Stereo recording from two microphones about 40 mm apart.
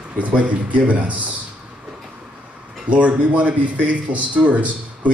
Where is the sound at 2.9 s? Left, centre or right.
Right.